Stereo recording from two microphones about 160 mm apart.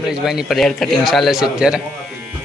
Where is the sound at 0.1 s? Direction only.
5° right (ahead or behind).